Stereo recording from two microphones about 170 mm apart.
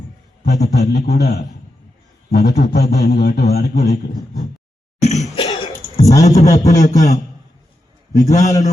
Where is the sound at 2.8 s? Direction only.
70° left (ahead or behind).